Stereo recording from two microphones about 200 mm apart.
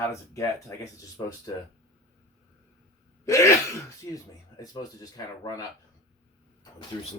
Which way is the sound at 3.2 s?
15° left (ahead or behind).